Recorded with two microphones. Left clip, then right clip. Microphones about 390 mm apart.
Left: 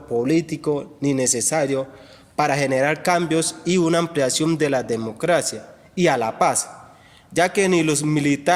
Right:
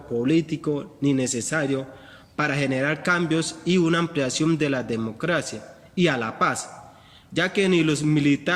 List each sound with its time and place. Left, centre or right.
0.2 s a man's voice: centre